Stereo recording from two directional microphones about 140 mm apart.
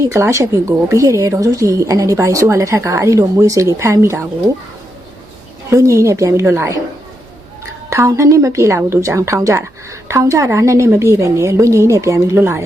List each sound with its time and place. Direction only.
0.0 s a woman's voice: 20° right (ahead or behind)
5.7 s a woman's voice: 20° right (ahead or behind)
7.9 s a woman's voice: 20° right (ahead or behind)